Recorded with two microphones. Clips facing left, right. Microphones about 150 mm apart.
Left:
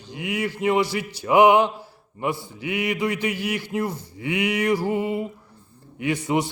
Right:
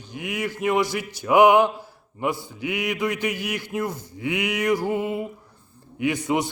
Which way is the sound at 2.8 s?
5° left (ahead or behind).